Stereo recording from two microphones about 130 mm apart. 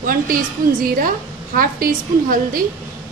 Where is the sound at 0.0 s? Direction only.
90° right.